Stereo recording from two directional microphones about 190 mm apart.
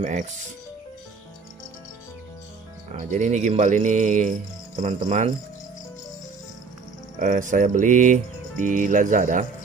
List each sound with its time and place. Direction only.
0.0 s speech: 40° right (ahead or behind)
2.9 s speech: 40° right (ahead or behind)
7.2 s music: 45° right (ahead or behind)